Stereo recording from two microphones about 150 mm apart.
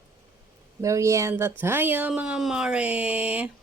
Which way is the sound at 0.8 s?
20° right (ahead or behind).